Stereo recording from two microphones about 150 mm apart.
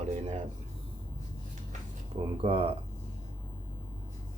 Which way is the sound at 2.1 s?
40° right (ahead or behind).